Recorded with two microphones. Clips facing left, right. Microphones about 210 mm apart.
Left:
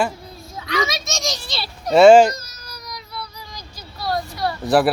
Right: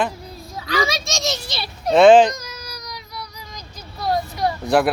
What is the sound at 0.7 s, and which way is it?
A child's voice, 30° right (ahead or behind).